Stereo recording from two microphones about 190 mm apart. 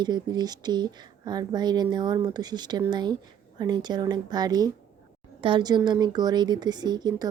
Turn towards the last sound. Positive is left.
turn(degrees=-20)  # may be behind; listen again after turning